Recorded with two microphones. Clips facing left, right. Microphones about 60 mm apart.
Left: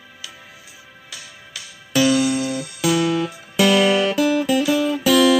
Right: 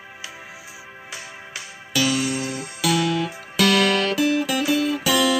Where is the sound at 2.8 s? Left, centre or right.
Centre.